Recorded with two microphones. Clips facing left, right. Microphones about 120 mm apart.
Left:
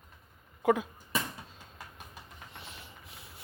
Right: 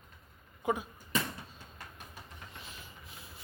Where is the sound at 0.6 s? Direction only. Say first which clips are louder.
Left 6 dB; 90° left.